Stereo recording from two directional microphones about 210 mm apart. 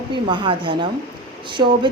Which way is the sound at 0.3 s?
25° right (ahead or behind).